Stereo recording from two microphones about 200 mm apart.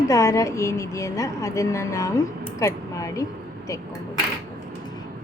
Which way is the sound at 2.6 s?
15° left (ahead or behind).